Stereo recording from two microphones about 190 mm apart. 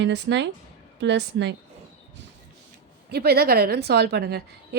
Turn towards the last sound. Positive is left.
turn(degrees=-60)  # may be behind; listen again after turning